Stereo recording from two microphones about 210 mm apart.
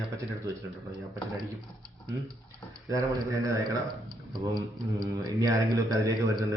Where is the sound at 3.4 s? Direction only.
15° right (ahead or behind).